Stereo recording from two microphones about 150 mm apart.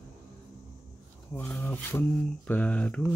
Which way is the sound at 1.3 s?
10° left (ahead or behind).